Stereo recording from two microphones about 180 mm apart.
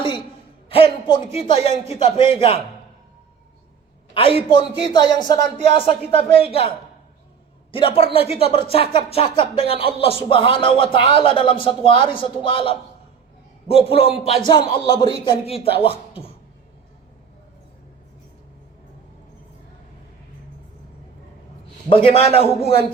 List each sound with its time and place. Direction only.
0.7 s speech: 30° left (ahead or behind)
4.1 s speech: 30° left (ahead or behind)
21.8 s speech: 30° left (ahead or behind)